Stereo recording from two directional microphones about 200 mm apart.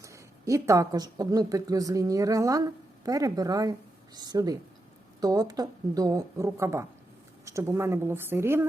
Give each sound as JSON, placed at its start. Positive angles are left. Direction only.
{"t": 0.0, "sound": "a woman's voice", "side_deg": -15}